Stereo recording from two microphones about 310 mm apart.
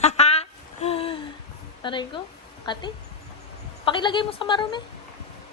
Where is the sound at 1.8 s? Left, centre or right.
Centre.